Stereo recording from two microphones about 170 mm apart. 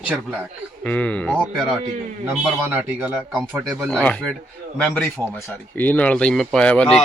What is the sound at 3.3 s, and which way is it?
Speech, centre (ahead or behind).